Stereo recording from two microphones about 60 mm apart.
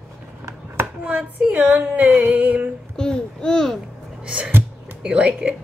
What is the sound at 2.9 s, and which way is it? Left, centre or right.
Babbling, centre.